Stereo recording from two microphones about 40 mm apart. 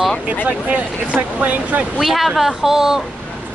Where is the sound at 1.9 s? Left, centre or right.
Centre.